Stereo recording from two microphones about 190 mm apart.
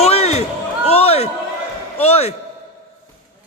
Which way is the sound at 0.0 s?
35° left (ahead or behind).